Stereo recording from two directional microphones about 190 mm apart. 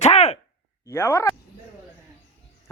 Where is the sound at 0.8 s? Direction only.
15° left (ahead or behind).